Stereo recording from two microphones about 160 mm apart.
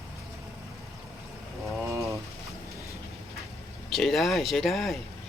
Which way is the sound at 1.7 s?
Centre (ahead or behind).